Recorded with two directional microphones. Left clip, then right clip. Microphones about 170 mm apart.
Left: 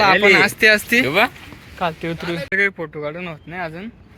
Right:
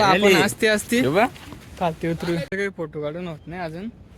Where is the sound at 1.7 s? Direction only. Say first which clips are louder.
Left 1 dB; 30° right (ahead or behind).